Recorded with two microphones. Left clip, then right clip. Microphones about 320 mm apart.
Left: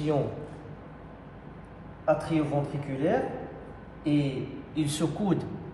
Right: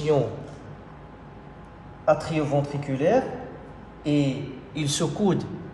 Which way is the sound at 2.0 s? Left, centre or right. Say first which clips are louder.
Right 4 dB; right.